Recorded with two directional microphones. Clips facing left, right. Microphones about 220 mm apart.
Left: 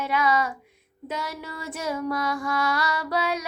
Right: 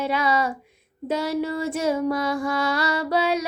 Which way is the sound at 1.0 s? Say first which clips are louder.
Right 9 dB; 30° right (ahead or behind).